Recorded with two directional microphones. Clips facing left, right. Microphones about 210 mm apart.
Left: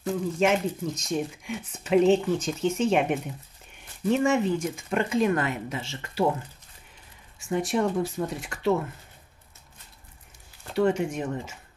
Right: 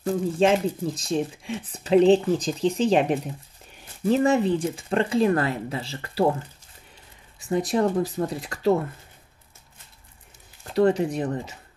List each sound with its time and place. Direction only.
0.0 s speech: 30° right (ahead or behind)
7.3 s speech: 35° right (ahead or behind)
10.7 s speech: 35° right (ahead or behind)